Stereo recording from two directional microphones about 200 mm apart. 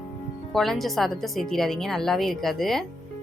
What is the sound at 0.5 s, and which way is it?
A woman's voice, centre (ahead or behind).